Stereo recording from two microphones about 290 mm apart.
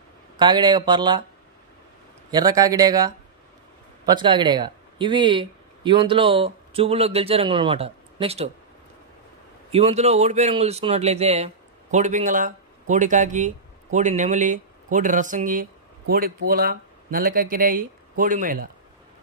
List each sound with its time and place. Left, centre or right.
0.4 s speech: centre
2.3 s speech: centre
9.7 s speech: right